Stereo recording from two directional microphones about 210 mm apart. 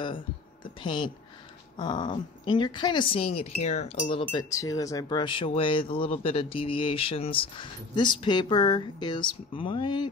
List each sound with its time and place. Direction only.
0.8 s speech: 20° left (ahead or behind)